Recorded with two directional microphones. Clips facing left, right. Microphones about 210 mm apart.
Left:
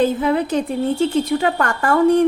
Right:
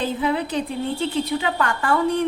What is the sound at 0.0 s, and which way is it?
A woman's voice, 45° left (ahead or behind).